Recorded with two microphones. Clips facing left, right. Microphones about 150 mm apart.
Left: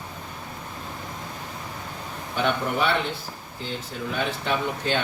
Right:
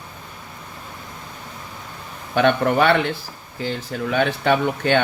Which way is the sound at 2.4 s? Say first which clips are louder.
Right 8 dB; 75° right (ahead or behind).